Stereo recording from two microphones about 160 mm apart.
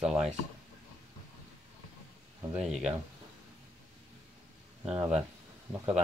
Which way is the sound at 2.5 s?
5° right (ahead or behind).